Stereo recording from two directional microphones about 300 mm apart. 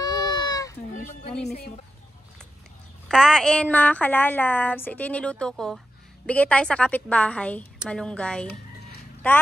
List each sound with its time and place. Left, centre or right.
0.0 s a sound: centre
1.4 s speech: left
3.1 s speech: centre